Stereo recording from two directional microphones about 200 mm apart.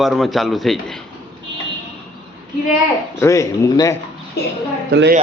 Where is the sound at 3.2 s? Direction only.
15° left (ahead or behind).